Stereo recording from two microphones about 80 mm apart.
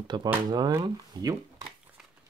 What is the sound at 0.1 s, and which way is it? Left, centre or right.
Speech, right.